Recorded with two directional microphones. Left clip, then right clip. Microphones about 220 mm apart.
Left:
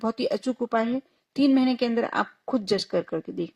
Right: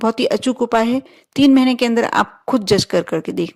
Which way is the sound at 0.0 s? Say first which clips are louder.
Right 9 dB; 35° right (ahead or behind).